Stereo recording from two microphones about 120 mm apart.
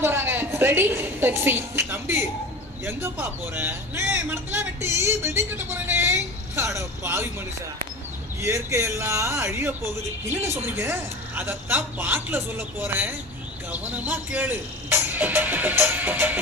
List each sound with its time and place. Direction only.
0.0 s a woman's voice: 20° right (ahead or behind)
8.4 s a man's voice: 20° right (ahead or behind)